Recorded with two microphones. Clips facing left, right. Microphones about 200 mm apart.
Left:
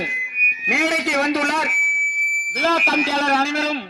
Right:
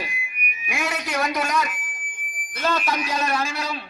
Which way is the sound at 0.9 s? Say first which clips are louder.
Left 2 dB; 90° left.